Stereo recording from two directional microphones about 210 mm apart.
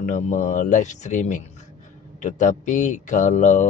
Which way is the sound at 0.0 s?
35° left (ahead or behind).